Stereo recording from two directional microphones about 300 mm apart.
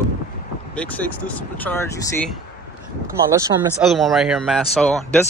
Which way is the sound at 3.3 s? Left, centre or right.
Centre.